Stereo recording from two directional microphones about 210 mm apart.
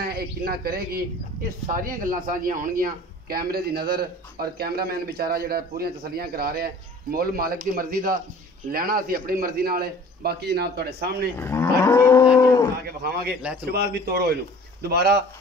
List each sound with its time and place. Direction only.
0.0 s a man's voice: 45° right (ahead or behind)
11.3 s livestock: 10° left (ahead or behind)
12.4 s cattle: 15° left (ahead or behind)
13.7 s a man's voice: 50° right (ahead or behind)